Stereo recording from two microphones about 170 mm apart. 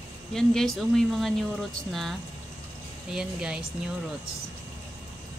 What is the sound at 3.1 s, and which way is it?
Speech, 5° right (ahead or behind).